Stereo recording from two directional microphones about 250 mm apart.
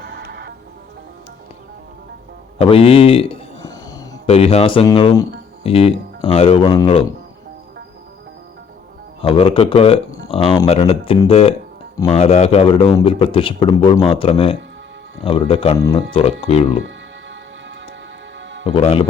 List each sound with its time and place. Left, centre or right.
0.0 s music: right
2.6 s a man's voice: left
9.2 s a man's voice: left
18.3 s music: right
18.6 s a man's voice: left